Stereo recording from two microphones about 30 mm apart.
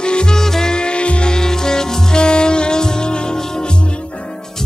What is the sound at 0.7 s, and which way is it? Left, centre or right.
Music, left.